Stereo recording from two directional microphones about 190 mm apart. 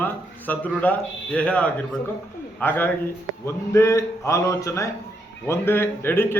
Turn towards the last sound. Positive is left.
turn(degrees=10)  # may be behind; listen again after turning